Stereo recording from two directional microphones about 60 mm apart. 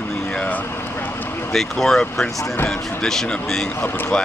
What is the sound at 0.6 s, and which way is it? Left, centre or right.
Vehicle, left.